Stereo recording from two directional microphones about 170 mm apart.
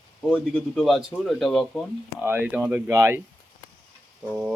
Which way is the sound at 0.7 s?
Centre (ahead or behind).